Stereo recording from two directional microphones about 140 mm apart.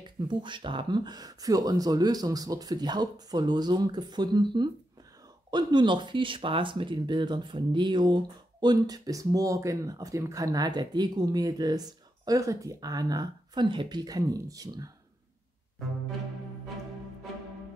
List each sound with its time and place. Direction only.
0.0 s speech: 35° right (ahead or behind)